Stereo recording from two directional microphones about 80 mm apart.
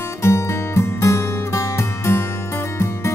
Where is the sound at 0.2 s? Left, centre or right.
Left.